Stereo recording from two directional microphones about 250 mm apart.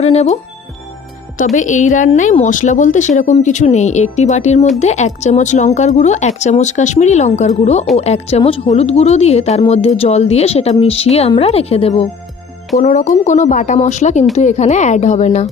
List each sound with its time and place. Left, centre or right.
0.0 s speech: left
1.5 s speech: left